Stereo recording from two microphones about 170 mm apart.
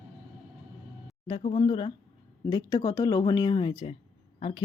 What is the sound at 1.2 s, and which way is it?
Speech, 30° left (ahead or behind).